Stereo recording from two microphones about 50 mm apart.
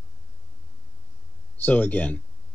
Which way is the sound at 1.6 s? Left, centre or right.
Left.